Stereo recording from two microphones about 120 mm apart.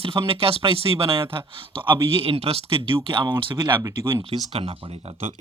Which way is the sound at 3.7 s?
20° right (ahead or behind).